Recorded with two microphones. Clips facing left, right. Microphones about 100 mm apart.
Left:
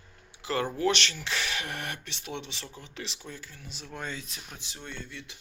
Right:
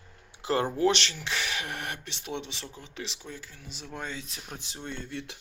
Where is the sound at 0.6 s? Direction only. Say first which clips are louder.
Right 1 dB; 20° right (ahead or behind).